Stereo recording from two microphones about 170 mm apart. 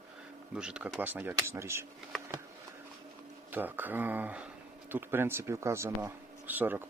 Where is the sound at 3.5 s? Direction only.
10° right (ahead or behind).